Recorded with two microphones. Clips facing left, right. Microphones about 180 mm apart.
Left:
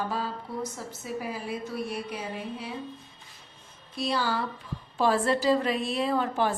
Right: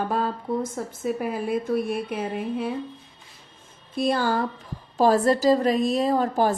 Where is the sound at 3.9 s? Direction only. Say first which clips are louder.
Right 6 dB; 50° right (ahead or behind).